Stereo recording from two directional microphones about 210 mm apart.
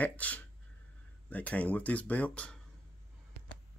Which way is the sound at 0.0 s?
5° left (ahead or behind).